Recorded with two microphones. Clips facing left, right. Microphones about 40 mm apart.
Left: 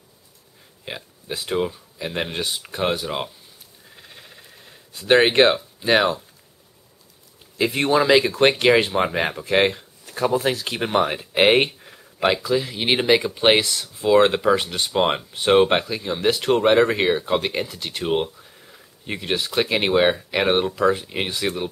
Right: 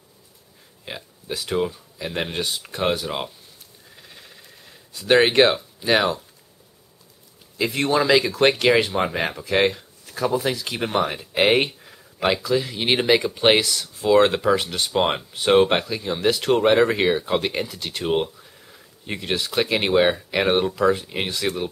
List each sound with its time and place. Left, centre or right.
0.8 s speech: centre
3.9 s a sound: centre
4.9 s speech: centre
7.5 s speech: left; by 21.6 s centre